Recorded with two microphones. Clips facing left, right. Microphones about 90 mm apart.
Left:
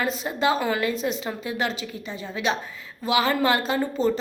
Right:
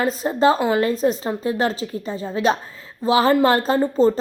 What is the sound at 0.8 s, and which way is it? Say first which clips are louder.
A woman's voice: right 6 dB; 40° right (ahead or behind).